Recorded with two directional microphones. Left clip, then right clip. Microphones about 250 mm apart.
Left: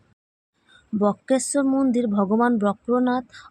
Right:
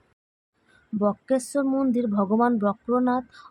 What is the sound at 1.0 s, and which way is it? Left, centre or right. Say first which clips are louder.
Speech: left 2 dB; centre.